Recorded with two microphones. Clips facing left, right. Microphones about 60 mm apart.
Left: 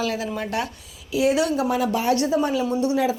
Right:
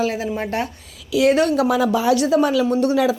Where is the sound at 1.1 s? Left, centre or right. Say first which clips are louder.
Right 4 dB; right.